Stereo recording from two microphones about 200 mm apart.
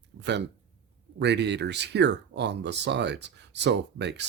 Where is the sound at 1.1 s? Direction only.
60° right (ahead or behind).